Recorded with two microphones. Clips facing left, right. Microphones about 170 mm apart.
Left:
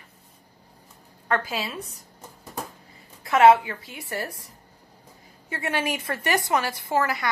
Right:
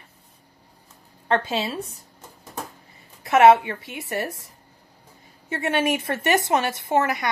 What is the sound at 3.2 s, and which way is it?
A woman's voice, 25° right (ahead or behind).